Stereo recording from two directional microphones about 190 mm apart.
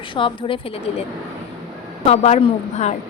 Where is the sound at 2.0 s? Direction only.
35° left (ahead or behind).